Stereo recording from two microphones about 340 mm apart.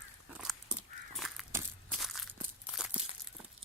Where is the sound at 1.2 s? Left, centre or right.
Centre.